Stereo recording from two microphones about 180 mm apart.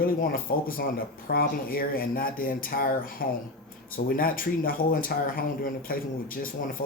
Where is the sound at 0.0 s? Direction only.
55° left (ahead or behind).